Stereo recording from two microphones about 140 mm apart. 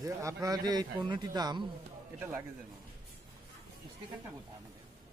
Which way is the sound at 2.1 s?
15° right (ahead or behind).